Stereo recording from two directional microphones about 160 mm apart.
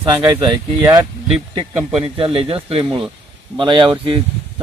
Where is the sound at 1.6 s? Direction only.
35° right (ahead or behind).